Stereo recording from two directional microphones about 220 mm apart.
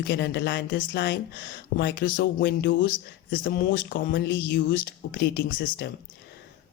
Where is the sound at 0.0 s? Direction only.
50° left (ahead or behind).